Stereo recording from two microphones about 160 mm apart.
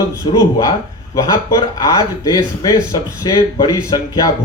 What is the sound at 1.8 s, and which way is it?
Speech, 25° left (ahead or behind).